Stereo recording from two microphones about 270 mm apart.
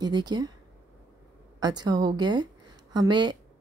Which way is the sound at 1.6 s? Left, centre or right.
Centre.